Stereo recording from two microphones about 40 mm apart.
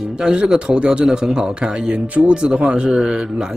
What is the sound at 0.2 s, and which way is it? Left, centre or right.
Speech, centre.